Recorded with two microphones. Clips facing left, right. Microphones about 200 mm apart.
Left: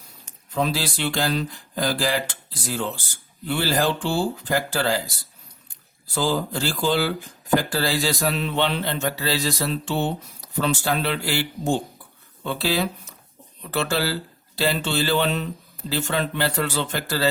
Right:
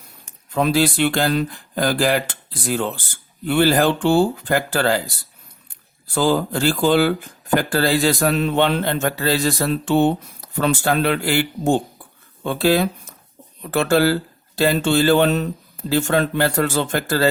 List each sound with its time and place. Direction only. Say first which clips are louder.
0.5 s speech: right 7 dB; 55° right (ahead or behind)
6.1 s speech: right 5 dB; 55° right (ahead or behind)